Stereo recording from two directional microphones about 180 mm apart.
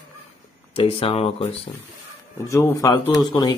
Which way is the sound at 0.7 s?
30° left (ahead or behind).